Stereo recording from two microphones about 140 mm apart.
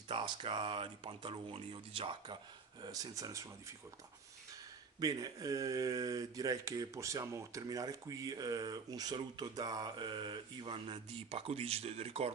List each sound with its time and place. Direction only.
0.1 s speech: 35° right (ahead or behind)
2.8 s speech: 25° right (ahead or behind)
5.0 s speech: 25° right (ahead or behind); by 12.3 s 45° right (ahead or behind)